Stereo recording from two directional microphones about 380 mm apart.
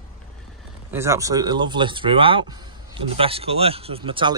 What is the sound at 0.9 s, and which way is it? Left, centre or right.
Speech, centre.